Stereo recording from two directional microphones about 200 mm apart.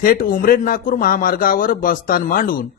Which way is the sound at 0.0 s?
45° left (ahead or behind).